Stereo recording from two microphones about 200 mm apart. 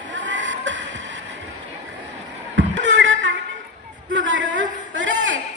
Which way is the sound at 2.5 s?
65° right (ahead or behind).